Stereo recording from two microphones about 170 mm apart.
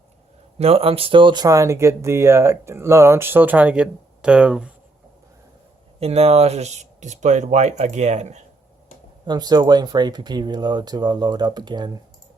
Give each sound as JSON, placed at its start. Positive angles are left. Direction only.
{"t": 0.6, "sound": "speech", "side_deg": -35}
{"t": 6.0, "sound": "speech", "side_deg": -35}
{"t": 9.2, "sound": "speech", "side_deg": -25}